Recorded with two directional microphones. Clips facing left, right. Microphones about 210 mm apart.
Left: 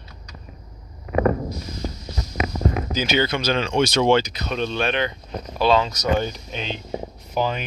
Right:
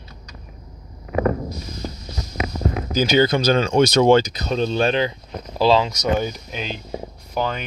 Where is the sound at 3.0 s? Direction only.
40° right (ahead or behind).